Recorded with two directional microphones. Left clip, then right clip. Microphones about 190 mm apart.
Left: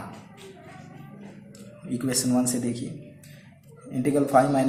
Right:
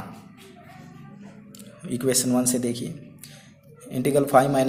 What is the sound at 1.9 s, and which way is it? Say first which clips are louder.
Speech: right 3 dB; 45° right (ahead or behind).